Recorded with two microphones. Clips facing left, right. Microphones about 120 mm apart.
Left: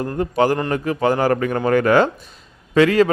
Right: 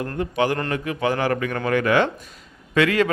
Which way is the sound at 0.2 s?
40° left (ahead or behind).